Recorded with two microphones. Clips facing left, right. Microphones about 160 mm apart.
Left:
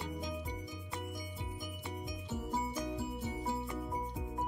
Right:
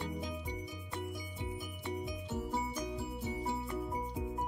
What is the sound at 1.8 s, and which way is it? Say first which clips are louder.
Music: right 4 dB; centre (ahead or behind).